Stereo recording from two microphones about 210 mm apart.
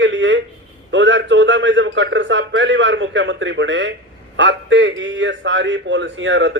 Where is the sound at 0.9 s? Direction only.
60° right (ahead or behind).